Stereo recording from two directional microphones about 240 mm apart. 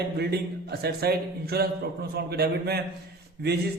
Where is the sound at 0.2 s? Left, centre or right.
Right.